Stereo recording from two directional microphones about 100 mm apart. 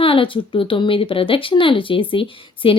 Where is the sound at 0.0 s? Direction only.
65° left (ahead or behind).